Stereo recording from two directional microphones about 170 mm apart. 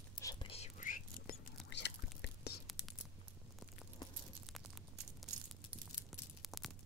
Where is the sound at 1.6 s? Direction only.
90° left.